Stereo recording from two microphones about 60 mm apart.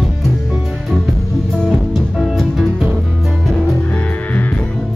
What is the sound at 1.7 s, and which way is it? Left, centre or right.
Music, centre.